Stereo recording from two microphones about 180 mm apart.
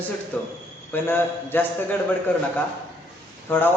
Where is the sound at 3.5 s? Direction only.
10° left (ahead or behind).